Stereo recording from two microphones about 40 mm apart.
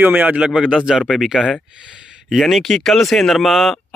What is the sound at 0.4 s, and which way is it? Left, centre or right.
Speech, right.